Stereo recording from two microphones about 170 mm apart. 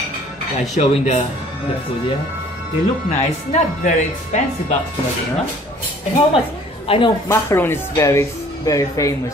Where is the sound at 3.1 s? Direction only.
45° left (ahead or behind).